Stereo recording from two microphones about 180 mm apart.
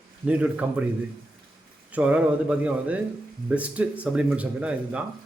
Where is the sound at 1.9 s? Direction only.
5° right (ahead or behind).